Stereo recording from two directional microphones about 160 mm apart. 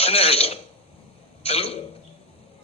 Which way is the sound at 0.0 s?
40° left (ahead or behind).